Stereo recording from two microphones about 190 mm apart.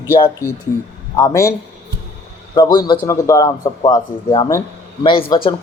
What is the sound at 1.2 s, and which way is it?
Speech, 15° left (ahead or behind).